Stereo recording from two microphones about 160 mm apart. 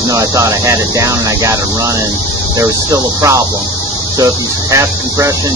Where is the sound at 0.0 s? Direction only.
20° right (ahead or behind).